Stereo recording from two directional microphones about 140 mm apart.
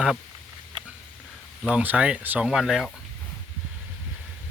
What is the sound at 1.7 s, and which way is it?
Speech, 10° right (ahead or behind).